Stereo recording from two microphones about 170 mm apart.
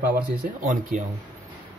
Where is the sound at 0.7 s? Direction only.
50° right (ahead or behind).